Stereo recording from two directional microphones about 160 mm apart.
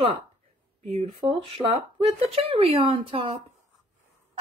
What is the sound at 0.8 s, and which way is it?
A woman's voice, 35° right (ahead or behind).